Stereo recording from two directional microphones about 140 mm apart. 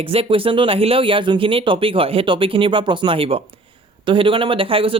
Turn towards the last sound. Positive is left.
turn(degrees=-40)  # may be behind; listen again after turning